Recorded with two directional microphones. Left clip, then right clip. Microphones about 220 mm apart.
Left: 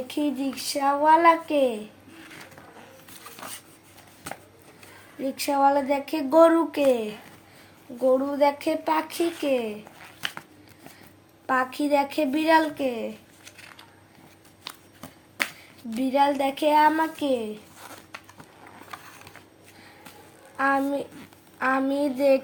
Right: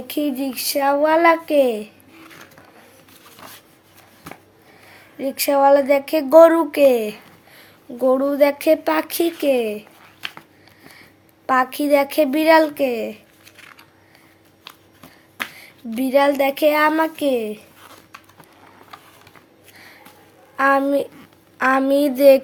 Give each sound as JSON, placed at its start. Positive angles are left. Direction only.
{"t": 0.1, "sound": "speech", "side_deg": -55}
{"t": 5.2, "sound": "speech", "side_deg": -45}
{"t": 11.4, "sound": "speech", "side_deg": -50}
{"t": 16.0, "sound": "speech", "side_deg": -50}
{"t": 20.6, "sound": "speech", "side_deg": -50}